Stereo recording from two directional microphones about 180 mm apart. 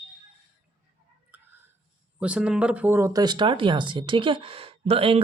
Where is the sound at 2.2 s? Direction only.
5° right (ahead or behind).